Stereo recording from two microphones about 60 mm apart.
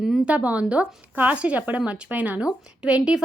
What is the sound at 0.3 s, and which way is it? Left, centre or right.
A woman's voice, right.